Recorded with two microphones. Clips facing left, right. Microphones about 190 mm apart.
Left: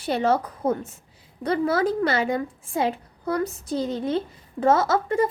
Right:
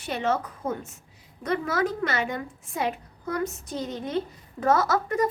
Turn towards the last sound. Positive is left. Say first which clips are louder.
# left 3 dB
turn(degrees=30)  # may be behind; listen again after turning